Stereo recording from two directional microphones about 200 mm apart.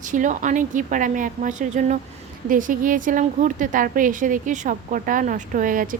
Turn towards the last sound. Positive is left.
turn(degrees=-40)  # may be behind; listen again after turning